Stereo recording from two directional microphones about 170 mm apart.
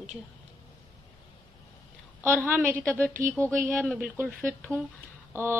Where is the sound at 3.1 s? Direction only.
55° right (ahead or behind).